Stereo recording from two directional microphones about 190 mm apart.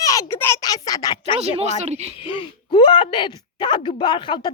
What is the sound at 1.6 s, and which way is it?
Speech, 35° right (ahead or behind).